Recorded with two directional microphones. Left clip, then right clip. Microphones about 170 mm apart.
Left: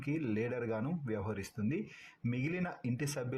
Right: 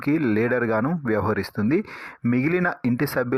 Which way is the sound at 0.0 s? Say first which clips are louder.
Right 15 dB; 25° right (ahead or behind).